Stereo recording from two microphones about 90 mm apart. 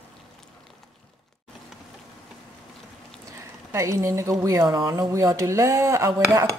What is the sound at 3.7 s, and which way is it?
Speech, 35° right (ahead or behind).